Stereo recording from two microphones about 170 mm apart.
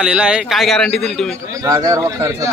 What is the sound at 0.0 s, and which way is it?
A man's voice, 5° right (ahead or behind).